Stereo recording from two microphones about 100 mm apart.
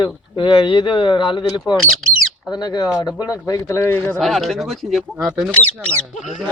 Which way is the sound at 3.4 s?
30° left (ahead or behind).